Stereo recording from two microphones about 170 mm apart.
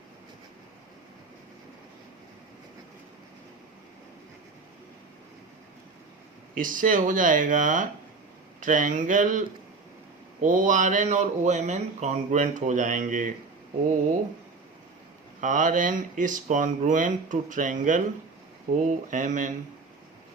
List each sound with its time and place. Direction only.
6.6 s speech: 50° right (ahead or behind)
10.4 s speech: 50° right (ahead or behind)
15.4 s speech: 50° right (ahead or behind)